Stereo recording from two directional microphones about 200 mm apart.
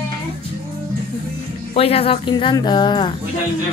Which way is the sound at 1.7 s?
30° left (ahead or behind).